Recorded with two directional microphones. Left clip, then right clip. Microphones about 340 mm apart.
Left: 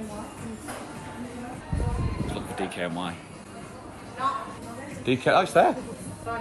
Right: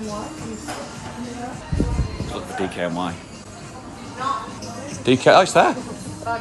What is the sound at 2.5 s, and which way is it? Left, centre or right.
Speech, centre.